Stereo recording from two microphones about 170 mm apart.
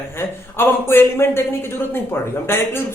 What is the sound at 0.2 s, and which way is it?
A man's voice, 15° left (ahead or behind).